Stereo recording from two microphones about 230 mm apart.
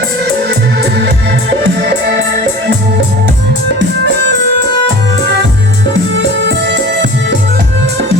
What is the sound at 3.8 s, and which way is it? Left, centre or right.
Music, right.